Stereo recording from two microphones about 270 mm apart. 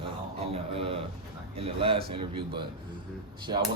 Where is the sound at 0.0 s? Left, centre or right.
Right.